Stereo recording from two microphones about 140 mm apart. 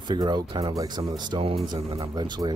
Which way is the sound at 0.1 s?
30° right (ahead or behind).